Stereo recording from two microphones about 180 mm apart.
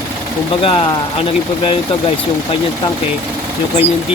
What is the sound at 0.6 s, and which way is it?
Speech, 30° left (ahead or behind).